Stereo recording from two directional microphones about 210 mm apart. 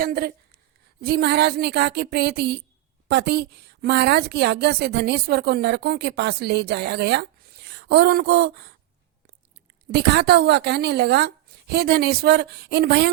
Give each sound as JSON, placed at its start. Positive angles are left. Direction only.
{"t": 0.0, "sound": "a woman's voice", "side_deg": -45}
{"t": 9.9, "sound": "a woman's voice", "side_deg": -50}